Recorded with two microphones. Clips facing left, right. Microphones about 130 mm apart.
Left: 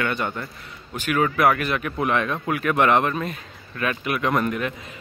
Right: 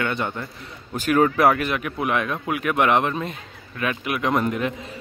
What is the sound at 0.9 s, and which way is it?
Speech, 35° right (ahead or behind).